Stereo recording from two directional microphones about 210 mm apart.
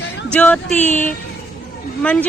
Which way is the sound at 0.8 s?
35° left (ahead or behind).